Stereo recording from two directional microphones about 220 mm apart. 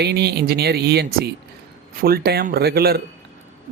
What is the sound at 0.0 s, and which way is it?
A man's voice, 45° right (ahead or behind).